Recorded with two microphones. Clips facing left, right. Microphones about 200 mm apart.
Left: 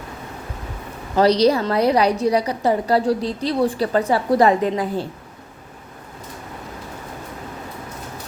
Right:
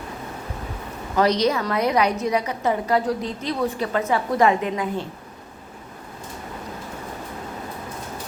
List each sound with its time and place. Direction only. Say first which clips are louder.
1.1 s a woman's voice: left 4 dB; 35° left (ahead or behind)